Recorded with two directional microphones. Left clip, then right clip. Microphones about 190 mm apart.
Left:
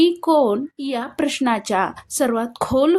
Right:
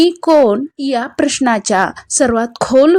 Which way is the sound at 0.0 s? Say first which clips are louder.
Right 6 dB; 30° right (ahead or behind).